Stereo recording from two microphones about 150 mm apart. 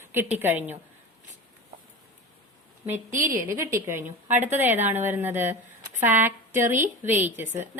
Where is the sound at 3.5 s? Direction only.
15° right (ahead or behind).